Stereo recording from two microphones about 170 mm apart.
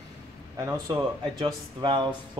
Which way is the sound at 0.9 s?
25° right (ahead or behind).